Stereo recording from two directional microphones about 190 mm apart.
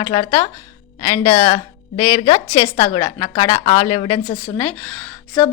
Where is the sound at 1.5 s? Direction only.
30° left (ahead or behind).